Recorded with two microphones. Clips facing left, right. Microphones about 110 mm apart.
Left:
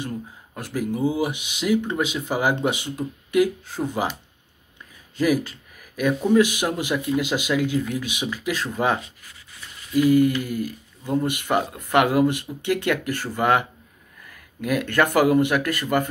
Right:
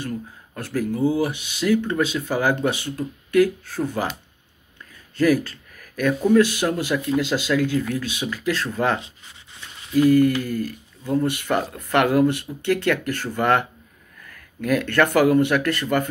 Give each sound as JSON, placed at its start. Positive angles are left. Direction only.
{"t": 0.6, "sound": "speech", "side_deg": 15}
{"t": 5.1, "sound": "speech", "side_deg": 15}
{"t": 9.0, "sound": "rub", "side_deg": -25}
{"t": 10.0, "sound": "speech", "side_deg": 15}